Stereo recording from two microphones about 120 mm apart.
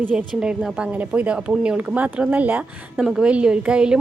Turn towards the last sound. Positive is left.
turn(degrees=-10)  # may be behind; listen again after turning